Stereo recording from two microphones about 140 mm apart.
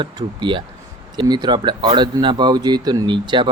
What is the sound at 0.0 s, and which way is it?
Speech, 35° right (ahead or behind).